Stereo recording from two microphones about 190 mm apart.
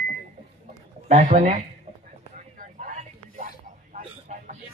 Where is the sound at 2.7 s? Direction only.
45° right (ahead or behind).